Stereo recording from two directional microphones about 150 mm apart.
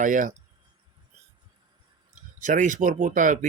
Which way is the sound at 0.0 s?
60° right (ahead or behind).